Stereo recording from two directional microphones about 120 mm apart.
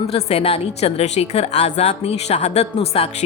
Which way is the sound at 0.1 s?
55° left (ahead or behind).